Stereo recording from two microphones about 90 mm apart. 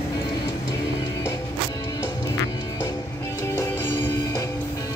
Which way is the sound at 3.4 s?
35° left (ahead or behind).